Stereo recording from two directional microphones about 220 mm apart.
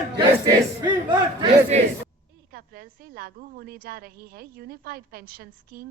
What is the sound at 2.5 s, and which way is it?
A woman's voice, 45° right (ahead or behind).